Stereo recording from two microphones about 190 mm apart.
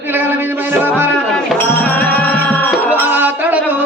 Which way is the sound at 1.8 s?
10° left (ahead or behind).